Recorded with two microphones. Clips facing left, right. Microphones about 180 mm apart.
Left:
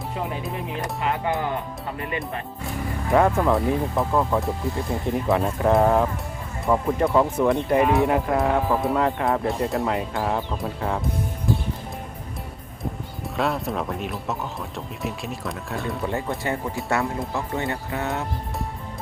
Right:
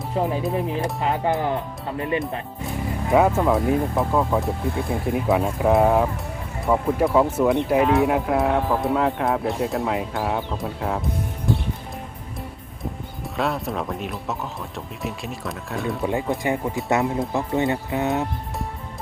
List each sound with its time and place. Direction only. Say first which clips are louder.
0.1 s speech: right 8 dB; 35° right (ahead or behind)
2.0 s speech: right 6 dB; 25° right (ahead or behind)
3.1 s speech: right 1 dB; 5° right (ahead or behind)
12.8 s speech: even; centre (ahead or behind)
16.0 s speech: right 4 dB; 15° right (ahead or behind)